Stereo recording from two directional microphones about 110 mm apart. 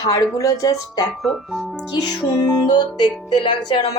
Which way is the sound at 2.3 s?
35° left (ahead or behind).